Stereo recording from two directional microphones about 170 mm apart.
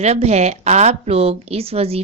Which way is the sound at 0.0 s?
40° right (ahead or behind).